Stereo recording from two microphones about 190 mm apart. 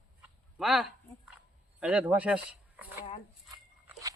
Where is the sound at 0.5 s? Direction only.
Centre (ahead or behind).